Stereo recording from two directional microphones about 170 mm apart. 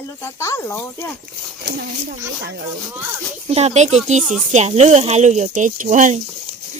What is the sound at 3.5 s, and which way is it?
Speech, 40° right (ahead or behind).